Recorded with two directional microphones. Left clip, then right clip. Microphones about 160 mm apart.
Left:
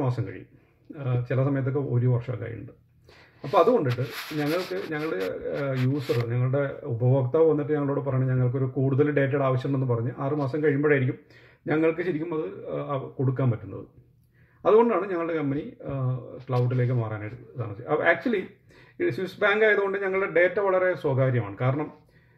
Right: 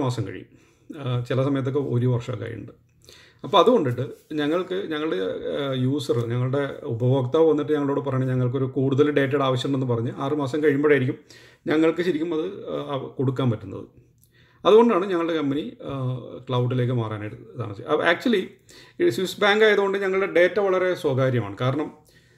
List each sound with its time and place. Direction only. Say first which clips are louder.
0.0 s speech: right 3 dB; 20° right (ahead or behind)
4.9 s speech: right 3 dB; 25° right (ahead or behind)
14.6 s speech: right 4 dB; 20° right (ahead or behind)